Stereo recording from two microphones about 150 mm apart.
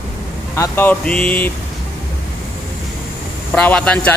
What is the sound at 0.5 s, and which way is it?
Speech, 15° left (ahead or behind).